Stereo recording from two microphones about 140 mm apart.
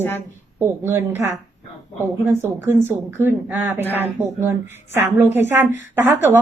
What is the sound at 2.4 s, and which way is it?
A woman's voice, 15° right (ahead or behind).